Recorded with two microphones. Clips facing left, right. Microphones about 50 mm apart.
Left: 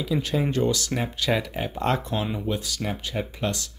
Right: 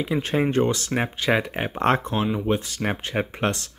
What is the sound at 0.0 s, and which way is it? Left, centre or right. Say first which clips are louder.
Speech: right 2 dB; right.